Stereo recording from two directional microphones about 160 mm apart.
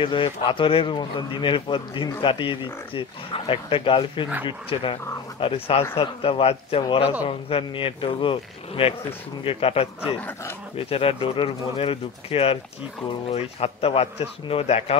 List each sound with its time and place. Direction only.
0.0 s speech: 30° left (ahead or behind)